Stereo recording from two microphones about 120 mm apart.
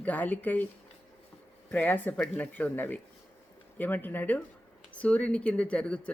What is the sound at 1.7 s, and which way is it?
Speech, 15° left (ahead or behind).